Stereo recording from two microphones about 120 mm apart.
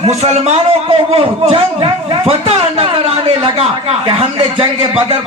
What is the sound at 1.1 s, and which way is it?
A man's voice, 55° right (ahead or behind).